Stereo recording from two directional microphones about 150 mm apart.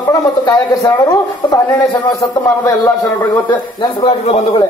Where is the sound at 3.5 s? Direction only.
30° left (ahead or behind).